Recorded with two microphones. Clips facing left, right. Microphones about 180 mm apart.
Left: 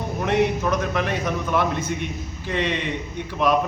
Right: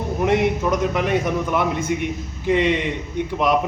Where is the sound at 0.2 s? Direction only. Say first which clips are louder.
Right 2 dB; 15° right (ahead or behind).